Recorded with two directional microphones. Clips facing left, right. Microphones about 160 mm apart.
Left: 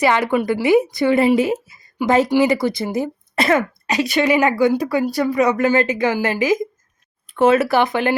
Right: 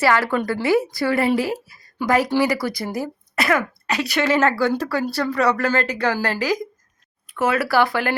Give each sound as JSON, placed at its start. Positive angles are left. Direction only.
{"t": 0.0, "sound": "a woman's voice", "side_deg": 20}